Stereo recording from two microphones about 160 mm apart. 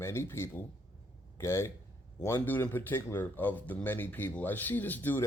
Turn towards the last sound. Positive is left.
turn(degrees=10)  # may be behind; listen again after turning